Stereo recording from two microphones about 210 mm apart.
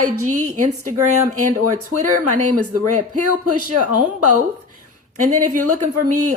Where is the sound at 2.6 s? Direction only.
90° right.